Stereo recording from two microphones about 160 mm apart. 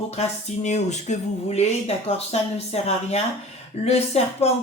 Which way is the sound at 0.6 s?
45° left (ahead or behind).